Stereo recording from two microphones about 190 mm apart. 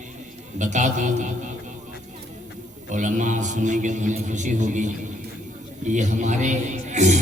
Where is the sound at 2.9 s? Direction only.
40° right (ahead or behind).